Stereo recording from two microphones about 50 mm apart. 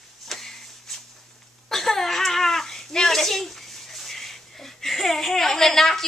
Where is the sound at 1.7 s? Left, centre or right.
Centre.